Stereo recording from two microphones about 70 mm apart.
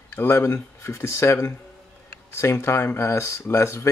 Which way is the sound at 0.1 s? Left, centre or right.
Left.